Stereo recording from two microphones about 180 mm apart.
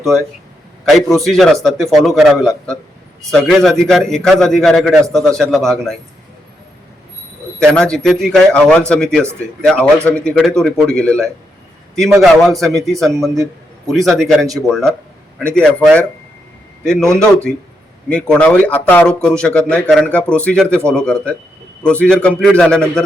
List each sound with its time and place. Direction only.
0.9 s speech: centre (ahead or behind)
7.7 s speech: 5° left (ahead or behind)
13.3 s a man's voice: 20° right (ahead or behind)
13.9 s speech: centre (ahead or behind)